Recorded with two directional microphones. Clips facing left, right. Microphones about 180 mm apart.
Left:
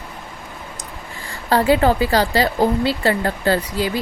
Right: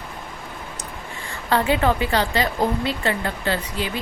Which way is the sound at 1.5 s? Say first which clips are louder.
Left 4 dB; 35° left (ahead or behind).